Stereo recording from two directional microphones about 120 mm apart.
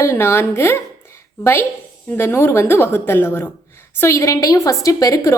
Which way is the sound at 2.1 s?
20° left (ahead or behind).